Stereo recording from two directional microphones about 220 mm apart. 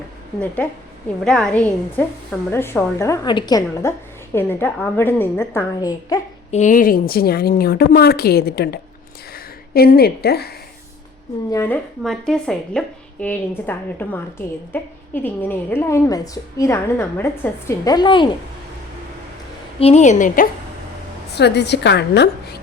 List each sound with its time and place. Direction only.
0.3 s a woman's voice: 5° left (ahead or behind)
6.5 s a woman's voice: 35° left (ahead or behind)
11.5 s speech: 10° left (ahead or behind)
19.8 s a woman's voice: 30° left (ahead or behind)
21.3 s a woman's voice: 50° left (ahead or behind)